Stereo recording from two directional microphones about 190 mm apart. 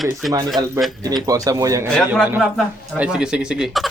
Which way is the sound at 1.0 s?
20° right (ahead or behind).